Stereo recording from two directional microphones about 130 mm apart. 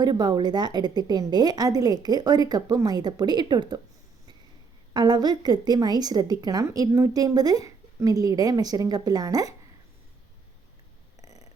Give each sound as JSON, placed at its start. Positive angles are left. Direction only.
{"t": 0.0, "sound": "a woman's voice", "side_deg": -30}
{"t": 4.9, "sound": "a woman's voice", "side_deg": -35}
{"t": 11.2, "sound": "a sound", "side_deg": -25}